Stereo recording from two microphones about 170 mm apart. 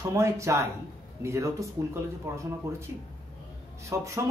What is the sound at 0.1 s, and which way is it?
Speech, 15° right (ahead or behind).